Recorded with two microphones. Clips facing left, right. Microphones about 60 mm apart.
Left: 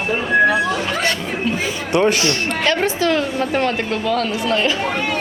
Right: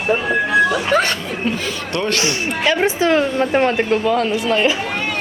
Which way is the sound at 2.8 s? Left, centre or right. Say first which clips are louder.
Right 2 dB; right.